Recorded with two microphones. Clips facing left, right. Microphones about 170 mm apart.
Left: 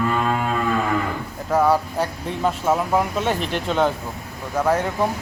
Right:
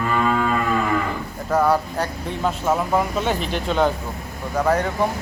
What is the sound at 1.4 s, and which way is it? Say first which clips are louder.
A man's voice: left 1 dB; 10° left (ahead or behind).